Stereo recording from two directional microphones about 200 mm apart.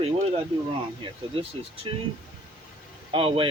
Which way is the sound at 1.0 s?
25° right (ahead or behind).